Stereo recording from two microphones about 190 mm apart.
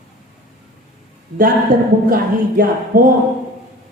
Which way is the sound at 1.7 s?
45° right (ahead or behind).